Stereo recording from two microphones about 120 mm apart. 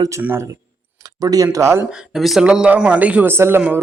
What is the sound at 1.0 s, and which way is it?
Speech, 30° right (ahead or behind).